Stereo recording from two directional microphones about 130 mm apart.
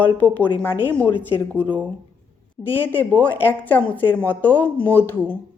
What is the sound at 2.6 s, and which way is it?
Speech, 15° left (ahead or behind).